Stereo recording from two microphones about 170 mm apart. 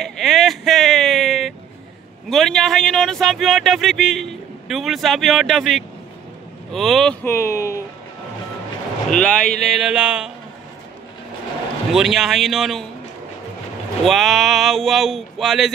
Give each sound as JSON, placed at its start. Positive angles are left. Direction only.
{"t": 0.0, "sound": "a sound", "side_deg": 0}
{"t": 2.2, "sound": "speech", "side_deg": 5}
{"t": 7.2, "sound": "speech", "side_deg": 15}
{"t": 9.1, "sound": "speech", "side_deg": 5}
{"t": 11.9, "sound": "speech", "side_deg": 0}
{"t": 14.0, "sound": "speech", "side_deg": 0}